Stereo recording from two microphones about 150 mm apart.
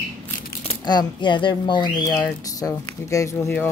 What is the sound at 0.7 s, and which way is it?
Speech, 30° left (ahead or behind).